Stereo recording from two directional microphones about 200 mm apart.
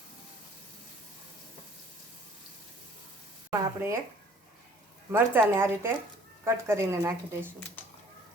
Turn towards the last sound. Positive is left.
turn(degrees=-10)  # may be behind; listen again after turning